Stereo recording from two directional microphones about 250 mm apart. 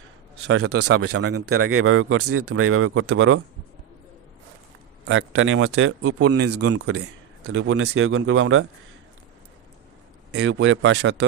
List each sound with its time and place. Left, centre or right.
0.4 s speech: right
5.0 s speech: right
6.7 s speech: right
10.3 s speech: right